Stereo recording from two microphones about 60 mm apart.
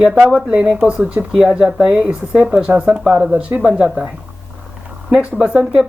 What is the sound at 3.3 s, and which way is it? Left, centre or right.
Speech, right.